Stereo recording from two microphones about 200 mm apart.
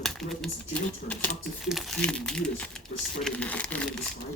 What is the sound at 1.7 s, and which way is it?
Speech, centre (ahead or behind).